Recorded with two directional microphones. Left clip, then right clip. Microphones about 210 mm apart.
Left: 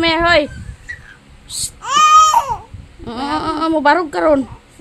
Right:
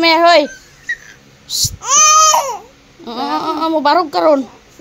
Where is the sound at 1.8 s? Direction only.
40° left (ahead or behind).